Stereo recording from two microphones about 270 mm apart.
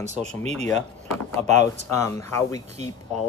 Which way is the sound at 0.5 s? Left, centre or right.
Centre.